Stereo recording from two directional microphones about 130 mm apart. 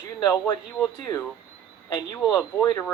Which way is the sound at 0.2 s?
30° left (ahead or behind).